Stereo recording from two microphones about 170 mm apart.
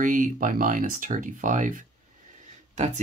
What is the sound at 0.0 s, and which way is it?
Speech, 50° right (ahead or behind).